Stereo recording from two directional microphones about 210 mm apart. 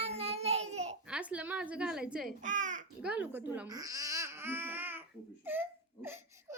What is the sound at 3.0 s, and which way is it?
Speech, 5° right (ahead or behind).